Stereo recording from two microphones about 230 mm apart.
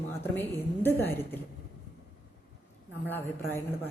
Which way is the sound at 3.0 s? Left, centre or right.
Centre.